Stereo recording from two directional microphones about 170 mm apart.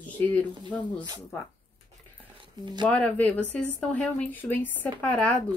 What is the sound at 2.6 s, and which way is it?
Speech, 25° right (ahead or behind).